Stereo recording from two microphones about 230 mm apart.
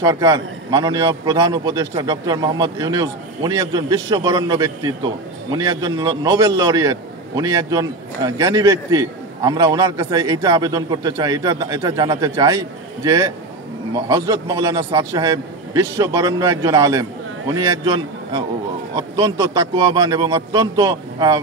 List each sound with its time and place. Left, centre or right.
0.0 s a man's voice: centre